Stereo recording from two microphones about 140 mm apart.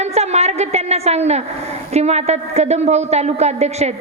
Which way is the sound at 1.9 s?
50° right (ahead or behind).